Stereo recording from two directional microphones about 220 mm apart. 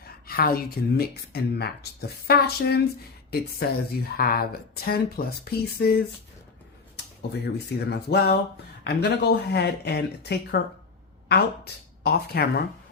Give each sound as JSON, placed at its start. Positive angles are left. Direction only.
{"t": 0.0, "sound": "speech", "side_deg": 40}
{"t": 4.2, "sound": "speech", "side_deg": 45}
{"t": 7.2, "sound": "a woman's voice", "side_deg": 50}